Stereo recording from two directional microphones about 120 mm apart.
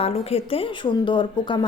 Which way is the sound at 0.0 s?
55° left (ahead or behind).